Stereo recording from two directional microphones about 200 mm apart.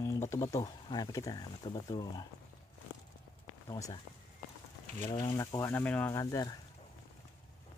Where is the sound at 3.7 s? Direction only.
15° left (ahead or behind).